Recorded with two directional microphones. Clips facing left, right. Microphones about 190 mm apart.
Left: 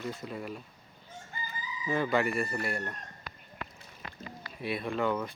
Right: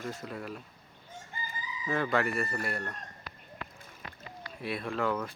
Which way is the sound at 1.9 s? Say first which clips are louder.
Left 1 dB; centre (ahead or behind).